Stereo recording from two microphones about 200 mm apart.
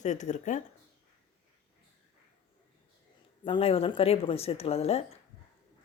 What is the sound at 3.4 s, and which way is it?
A woman's voice, 25° left (ahead or behind).